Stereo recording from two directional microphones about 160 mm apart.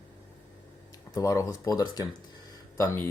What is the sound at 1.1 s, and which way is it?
Speech, 20° left (ahead or behind).